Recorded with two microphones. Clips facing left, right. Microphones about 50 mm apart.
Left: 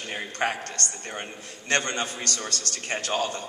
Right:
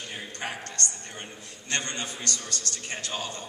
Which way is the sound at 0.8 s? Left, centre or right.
Right.